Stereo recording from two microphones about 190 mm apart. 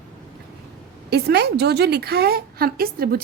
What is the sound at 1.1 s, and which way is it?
A woman's voice, 60° right (ahead or behind).